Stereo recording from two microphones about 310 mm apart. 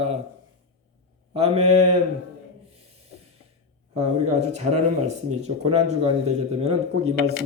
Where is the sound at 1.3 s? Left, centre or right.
Centre.